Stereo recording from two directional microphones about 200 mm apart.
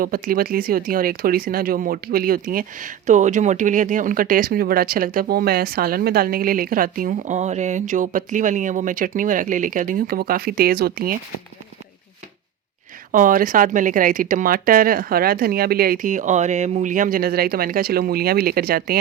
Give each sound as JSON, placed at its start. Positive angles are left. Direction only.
{"t": 0.0, "sound": "speech", "side_deg": -45}
{"t": 13.1, "sound": "speech", "side_deg": -40}